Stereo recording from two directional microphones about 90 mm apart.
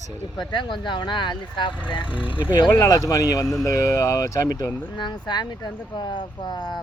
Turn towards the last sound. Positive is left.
turn(degrees=50)  # may be behind; listen again after turning